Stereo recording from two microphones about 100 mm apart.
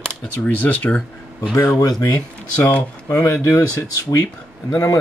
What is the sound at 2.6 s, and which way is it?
Speech, 20° left (ahead or behind).